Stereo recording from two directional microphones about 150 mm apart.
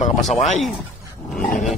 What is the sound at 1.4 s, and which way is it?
Speech, 60° left (ahead or behind).